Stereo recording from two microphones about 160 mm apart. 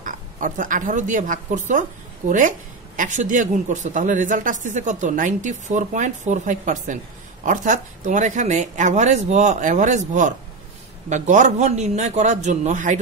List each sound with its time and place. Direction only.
0.0 s speech: 55° right (ahead or behind)